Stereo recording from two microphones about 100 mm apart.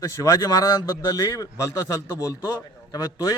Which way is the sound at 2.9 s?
35° left (ahead or behind).